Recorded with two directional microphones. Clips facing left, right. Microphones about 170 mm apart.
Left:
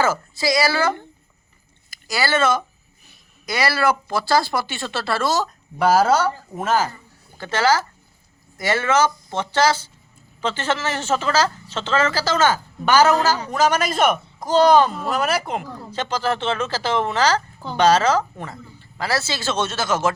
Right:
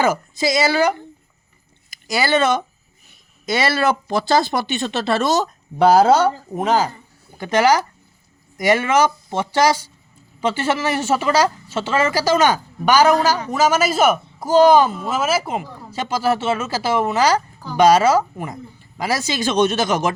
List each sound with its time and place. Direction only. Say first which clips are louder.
0.0 s speech: right 2 dB; 20° right (ahead or behind)